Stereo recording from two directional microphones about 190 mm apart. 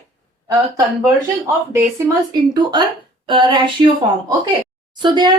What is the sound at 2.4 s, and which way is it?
Speech, 20° right (ahead or behind).